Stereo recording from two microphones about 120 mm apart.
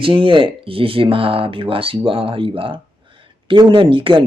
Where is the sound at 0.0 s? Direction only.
45° right (ahead or behind).